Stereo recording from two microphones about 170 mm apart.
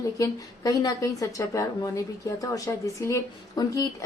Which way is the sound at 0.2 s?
20° left (ahead or behind).